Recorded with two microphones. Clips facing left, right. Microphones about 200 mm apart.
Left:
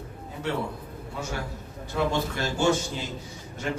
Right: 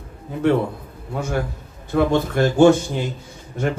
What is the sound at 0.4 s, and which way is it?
Speech, 55° right (ahead or behind).